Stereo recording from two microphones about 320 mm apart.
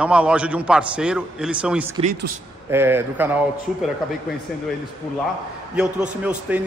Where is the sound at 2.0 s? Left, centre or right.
Right.